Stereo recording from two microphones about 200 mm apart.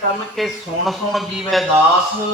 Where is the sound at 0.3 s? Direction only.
Centre (ahead or behind).